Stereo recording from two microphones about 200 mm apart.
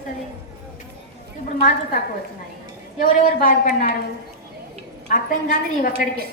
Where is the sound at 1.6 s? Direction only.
45° left (ahead or behind).